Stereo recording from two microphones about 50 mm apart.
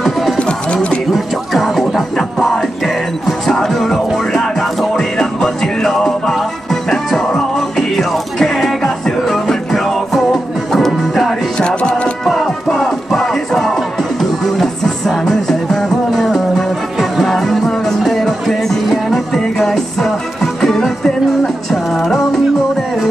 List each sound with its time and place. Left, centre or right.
0.0 s music: centre
0.4 s music: left
1.1 s music: centre
11.5 s music: centre
12.3 s music: centre